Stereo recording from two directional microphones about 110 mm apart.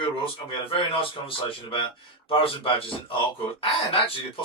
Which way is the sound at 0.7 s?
50° left (ahead or behind).